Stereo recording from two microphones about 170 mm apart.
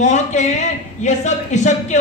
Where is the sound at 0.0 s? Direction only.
45° left (ahead or behind).